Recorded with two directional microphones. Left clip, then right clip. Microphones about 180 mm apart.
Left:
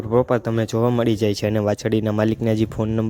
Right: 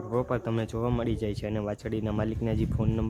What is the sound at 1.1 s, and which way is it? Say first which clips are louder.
Speech: left 12 dB; 45° left (ahead or behind).